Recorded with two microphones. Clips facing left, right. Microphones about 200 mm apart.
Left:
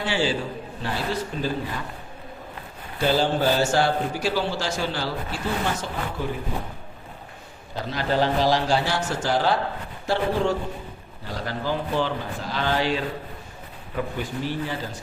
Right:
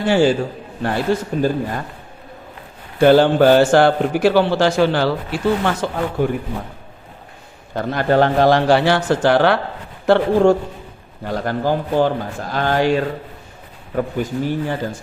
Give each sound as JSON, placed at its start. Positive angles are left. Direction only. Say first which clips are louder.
{"t": 0.0, "sound": "speech", "louder": "right 9 dB", "side_deg": -50}
{"t": 3.0, "sound": "a man's voice", "louder": "right 10 dB", "side_deg": -60}
{"t": 7.8, "sound": "a man's voice", "louder": "right 8 dB", "side_deg": -55}
{"t": 10.1, "sound": "speech", "louder": "right 10 dB", "side_deg": -50}